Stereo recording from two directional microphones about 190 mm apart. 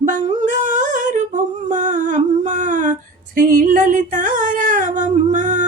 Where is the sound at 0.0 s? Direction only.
40° right (ahead or behind).